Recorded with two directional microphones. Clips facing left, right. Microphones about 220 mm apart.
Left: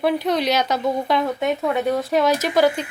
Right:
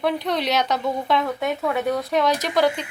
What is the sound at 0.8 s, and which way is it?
A woman's voice, 20° left (ahead or behind).